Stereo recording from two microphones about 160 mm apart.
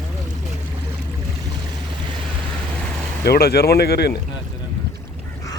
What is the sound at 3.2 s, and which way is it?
Speech, 80° left.